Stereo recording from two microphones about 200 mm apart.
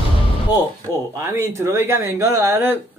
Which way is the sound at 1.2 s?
15° right (ahead or behind).